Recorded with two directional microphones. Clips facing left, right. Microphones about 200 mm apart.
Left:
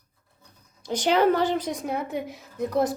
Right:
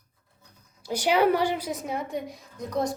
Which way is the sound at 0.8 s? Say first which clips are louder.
Left 1 dB; 10° right (ahead or behind).